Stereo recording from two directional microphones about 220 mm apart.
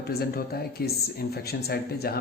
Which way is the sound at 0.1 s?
45° left (ahead or behind).